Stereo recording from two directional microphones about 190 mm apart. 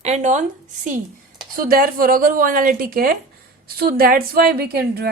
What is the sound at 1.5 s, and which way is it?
A woman's voice, 50° right (ahead or behind).